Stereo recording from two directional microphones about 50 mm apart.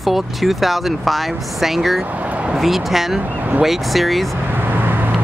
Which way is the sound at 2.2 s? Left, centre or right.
Right.